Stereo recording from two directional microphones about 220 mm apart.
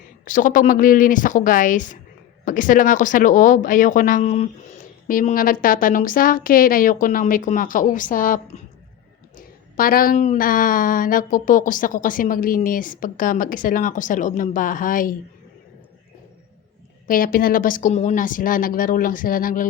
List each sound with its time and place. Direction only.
0.3 s speech: 35° left (ahead or behind)
17.1 s speech: 40° left (ahead or behind)